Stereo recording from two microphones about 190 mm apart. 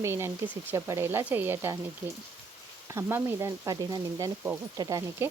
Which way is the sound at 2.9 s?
15° right (ahead or behind).